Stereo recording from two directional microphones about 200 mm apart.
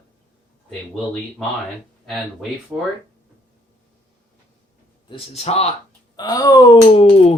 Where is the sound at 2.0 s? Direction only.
Centre (ahead or behind).